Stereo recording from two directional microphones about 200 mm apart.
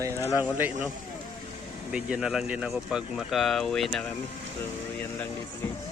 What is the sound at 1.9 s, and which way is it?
Speech, 5° right (ahead or behind).